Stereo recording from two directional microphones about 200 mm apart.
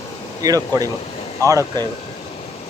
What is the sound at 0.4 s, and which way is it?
Speech, 20° right (ahead or behind).